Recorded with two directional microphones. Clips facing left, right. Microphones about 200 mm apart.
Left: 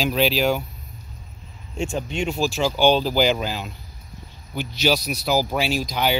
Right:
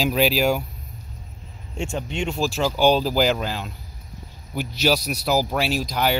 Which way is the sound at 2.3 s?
Centre (ahead or behind).